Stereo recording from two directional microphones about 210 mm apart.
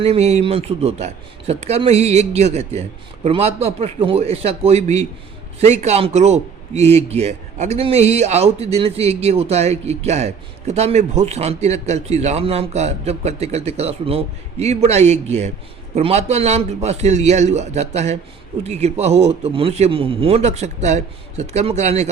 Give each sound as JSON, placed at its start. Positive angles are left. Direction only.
{"t": 0.0, "sound": "a man's voice", "side_deg": -30}